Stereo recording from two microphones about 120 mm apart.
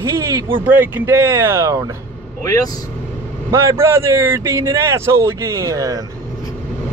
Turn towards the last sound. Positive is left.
turn(degrees=-30)  # may be behind; listen again after turning